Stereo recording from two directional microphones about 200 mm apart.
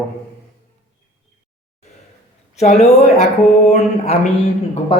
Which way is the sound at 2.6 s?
35° left (ahead or behind).